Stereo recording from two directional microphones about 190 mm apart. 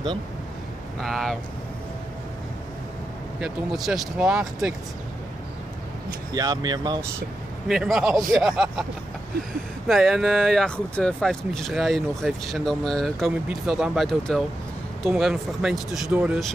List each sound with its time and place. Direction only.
1.0 s speech: centre (ahead or behind)
3.3 s speech: centre (ahead or behind)
6.3 s speech: 20° right (ahead or behind)
7.6 s speech: 5° right (ahead or behind)
9.8 s speech: centre (ahead or behind)